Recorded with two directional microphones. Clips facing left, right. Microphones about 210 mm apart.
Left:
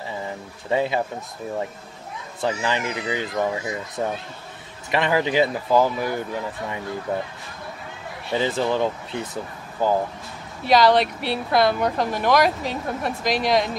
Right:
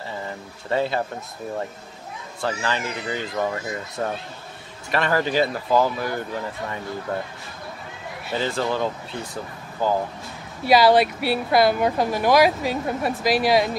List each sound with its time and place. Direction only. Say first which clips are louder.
0.7 s speech: left 1 dB; 15° left (ahead or behind)
2.4 s speech: left 2 dB; 15° left (ahead or behind)
8.3 s speech: left 2 dB; 20° left (ahead or behind)
10.7 s speech: right 1 dB; 5° right (ahead or behind)